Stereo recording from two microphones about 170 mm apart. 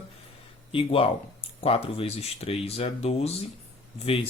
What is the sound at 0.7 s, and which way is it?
Speech, 30° left (ahead or behind).